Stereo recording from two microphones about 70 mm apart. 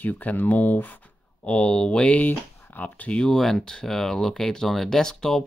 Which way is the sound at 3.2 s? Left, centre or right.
Centre.